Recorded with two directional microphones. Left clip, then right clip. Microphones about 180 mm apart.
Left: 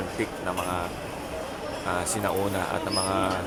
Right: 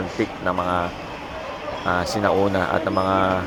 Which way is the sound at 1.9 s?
25° right (ahead or behind).